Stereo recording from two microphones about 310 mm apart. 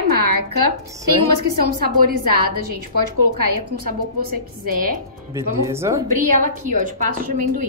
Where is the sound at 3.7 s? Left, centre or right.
Right.